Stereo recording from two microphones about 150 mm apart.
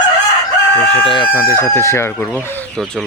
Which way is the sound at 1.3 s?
15° left (ahead or behind).